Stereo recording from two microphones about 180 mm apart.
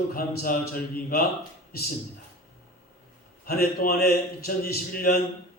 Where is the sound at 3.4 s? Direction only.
55° left (ahead or behind).